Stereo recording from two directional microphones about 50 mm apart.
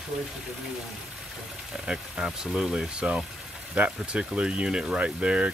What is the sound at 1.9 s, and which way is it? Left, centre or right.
Speech, centre.